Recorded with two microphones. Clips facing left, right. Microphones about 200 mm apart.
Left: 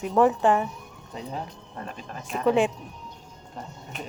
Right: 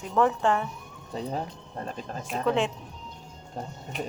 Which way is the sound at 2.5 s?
15° left (ahead or behind).